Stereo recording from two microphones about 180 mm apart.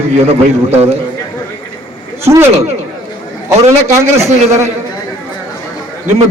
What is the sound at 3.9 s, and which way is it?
Speech, 15° right (ahead or behind).